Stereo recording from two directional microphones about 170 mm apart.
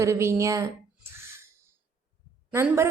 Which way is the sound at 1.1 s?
15° right (ahead or behind).